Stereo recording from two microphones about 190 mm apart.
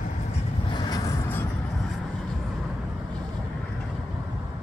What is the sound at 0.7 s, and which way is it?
Vehicle, 20° left (ahead or behind).